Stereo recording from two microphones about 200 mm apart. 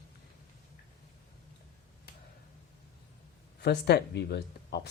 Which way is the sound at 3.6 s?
55° left (ahead or behind).